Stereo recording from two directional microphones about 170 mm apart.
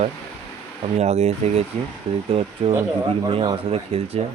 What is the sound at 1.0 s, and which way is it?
Speech, 40° right (ahead or behind).